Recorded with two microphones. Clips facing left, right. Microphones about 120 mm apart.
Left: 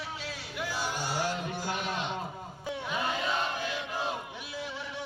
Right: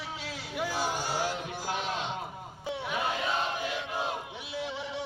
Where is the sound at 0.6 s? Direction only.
45° right (ahead or behind).